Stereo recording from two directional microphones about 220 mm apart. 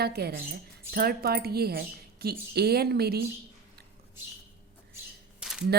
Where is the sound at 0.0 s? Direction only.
45° right (ahead or behind).